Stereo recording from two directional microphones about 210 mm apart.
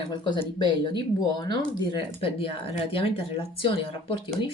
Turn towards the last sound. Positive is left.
turn(degrees=25)  # may be behind; listen again after turning